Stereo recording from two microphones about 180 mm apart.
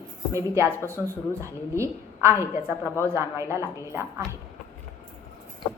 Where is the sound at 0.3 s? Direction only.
15° right (ahead or behind).